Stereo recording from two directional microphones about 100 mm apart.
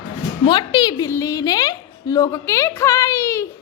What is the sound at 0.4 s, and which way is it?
A woman's voice, 50° left (ahead or behind).